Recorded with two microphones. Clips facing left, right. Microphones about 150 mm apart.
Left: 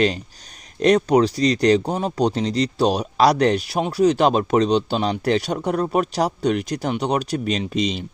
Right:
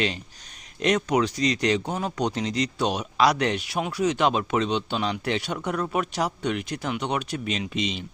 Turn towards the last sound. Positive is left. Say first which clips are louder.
# left 6 dB
turn(degrees=40)  # may be behind; listen again after turning